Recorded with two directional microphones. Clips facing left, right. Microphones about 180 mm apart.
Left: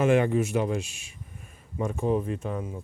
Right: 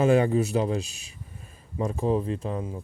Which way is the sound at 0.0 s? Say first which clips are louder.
Right 1 dB; 35° right (ahead or behind).